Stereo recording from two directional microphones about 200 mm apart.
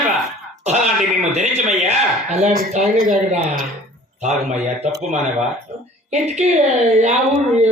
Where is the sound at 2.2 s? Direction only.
35° right (ahead or behind).